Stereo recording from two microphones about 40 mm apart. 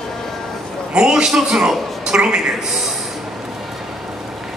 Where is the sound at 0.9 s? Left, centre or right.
Centre.